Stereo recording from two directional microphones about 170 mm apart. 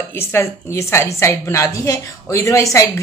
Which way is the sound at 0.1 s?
15° left (ahead or behind).